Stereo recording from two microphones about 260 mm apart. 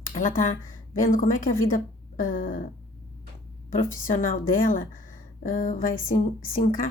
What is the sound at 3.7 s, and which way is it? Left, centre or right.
Speech, left.